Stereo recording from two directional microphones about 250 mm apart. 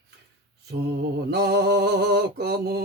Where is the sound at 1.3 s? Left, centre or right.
Right.